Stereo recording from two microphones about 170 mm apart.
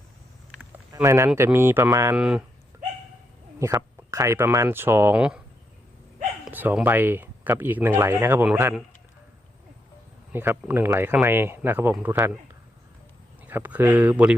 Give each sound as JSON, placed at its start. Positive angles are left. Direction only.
{"t": 0.5, "sound": "a sound", "side_deg": -10}
{"t": 1.4, "sound": "speech", "side_deg": -15}
{"t": 3.6, "sound": "speech", "side_deg": -20}
{"t": 6.4, "sound": "speech", "side_deg": -10}
{"t": 10.3, "sound": "speech", "side_deg": -15}
{"t": 13.4, "sound": "speech", "side_deg": -10}